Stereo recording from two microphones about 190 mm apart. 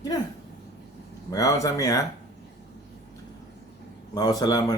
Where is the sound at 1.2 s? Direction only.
20° left (ahead or behind).